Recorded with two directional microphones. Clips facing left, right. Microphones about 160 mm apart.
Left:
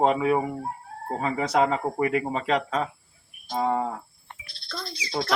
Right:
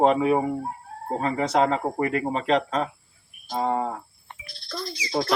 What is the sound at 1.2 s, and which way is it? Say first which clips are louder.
Speech: right 1 dB; 5° left (ahead or behind).